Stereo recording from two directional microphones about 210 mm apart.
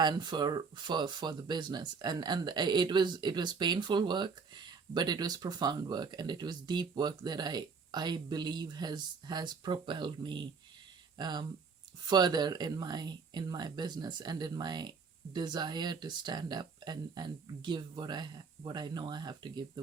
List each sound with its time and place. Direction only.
0.0 s speech: 20° right (ahead or behind)